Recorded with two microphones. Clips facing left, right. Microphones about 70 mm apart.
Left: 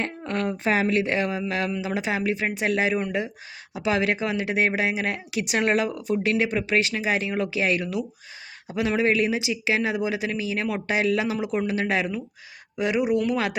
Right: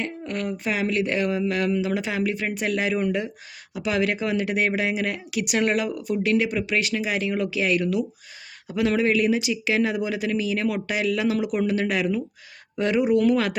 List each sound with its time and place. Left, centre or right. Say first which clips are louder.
0.0 s speech: left 2 dB; left
12.7 s speech: right 2 dB; centre